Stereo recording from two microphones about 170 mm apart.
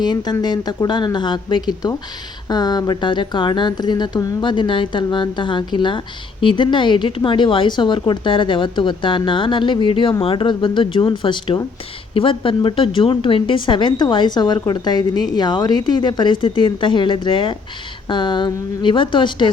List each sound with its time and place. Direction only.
0.0 s speech: 25° left (ahead or behind)